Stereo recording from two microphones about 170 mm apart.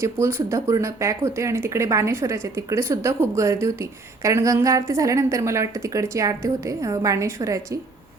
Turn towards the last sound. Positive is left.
turn(degrees=-20)  # may be behind; listen again after turning